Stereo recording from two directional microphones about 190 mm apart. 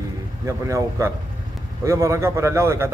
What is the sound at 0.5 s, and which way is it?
A man's voice, 15° right (ahead or behind).